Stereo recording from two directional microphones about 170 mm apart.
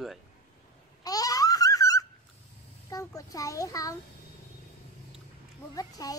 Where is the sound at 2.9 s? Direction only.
20° left (ahead or behind).